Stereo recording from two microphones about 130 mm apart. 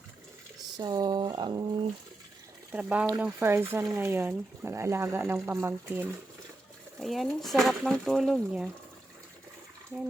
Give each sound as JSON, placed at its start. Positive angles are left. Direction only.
{"t": 0.8, "sound": "speech", "side_deg": -35}
{"t": 2.7, "sound": "speech", "side_deg": -10}
{"t": 7.0, "sound": "speech", "side_deg": 0}